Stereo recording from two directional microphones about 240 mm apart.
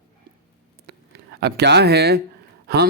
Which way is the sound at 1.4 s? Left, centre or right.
Right.